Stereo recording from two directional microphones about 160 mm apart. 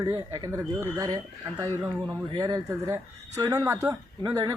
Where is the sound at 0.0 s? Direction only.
20° right (ahead or behind).